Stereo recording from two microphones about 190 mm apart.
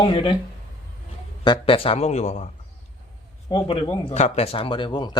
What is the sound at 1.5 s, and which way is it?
Speech, 30° left (ahead or behind).